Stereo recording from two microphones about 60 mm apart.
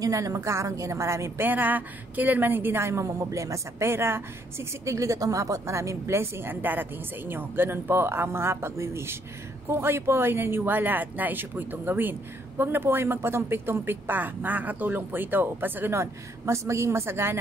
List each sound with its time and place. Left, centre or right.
0.0 s a woman's voice: right
1.4 s speech: right
2.9 s speech: right
15.9 s speech: right